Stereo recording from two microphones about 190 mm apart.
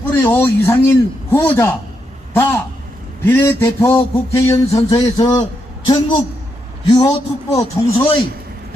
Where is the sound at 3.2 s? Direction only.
10° left (ahead or behind).